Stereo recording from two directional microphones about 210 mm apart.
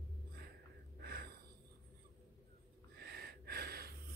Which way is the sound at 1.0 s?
45° right (ahead or behind).